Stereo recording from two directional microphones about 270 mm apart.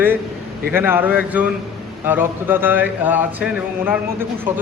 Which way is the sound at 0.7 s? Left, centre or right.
Centre.